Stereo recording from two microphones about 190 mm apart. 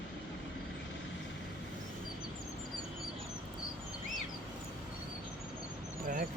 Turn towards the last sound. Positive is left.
turn(degrees=-50)  # may be behind; listen again after turning